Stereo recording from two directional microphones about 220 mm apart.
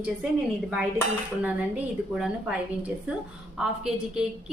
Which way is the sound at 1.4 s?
5° right (ahead or behind).